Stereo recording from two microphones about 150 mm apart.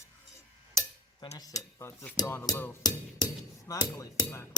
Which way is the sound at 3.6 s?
20° left (ahead or behind).